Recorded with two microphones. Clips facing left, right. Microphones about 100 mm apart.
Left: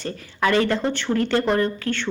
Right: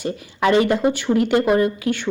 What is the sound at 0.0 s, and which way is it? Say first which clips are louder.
Speech: right 3 dB; 20° right (ahead or behind).